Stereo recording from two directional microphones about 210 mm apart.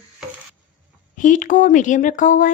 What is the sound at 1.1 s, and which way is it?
Speech, 40° left (ahead or behind).